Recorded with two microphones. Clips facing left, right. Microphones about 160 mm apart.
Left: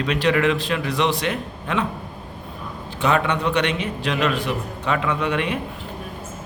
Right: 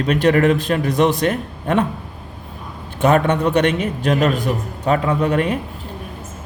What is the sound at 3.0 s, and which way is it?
A man's voice, 45° right (ahead or behind).